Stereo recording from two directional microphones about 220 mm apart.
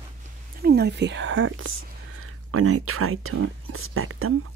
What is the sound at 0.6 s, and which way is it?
Speech, 45° right (ahead or behind).